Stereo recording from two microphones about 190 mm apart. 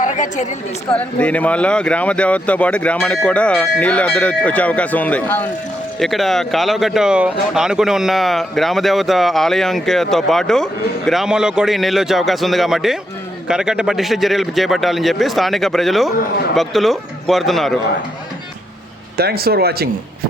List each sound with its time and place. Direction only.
0.0 s a woman's voice: 40° left (ahead or behind)
0.9 s speech: 5° left (ahead or behind)
19.1 s speech: 55° right (ahead or behind)